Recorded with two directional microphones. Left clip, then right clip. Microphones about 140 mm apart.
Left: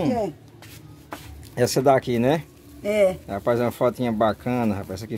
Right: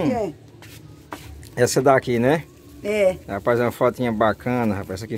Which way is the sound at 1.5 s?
20° left (ahead or behind).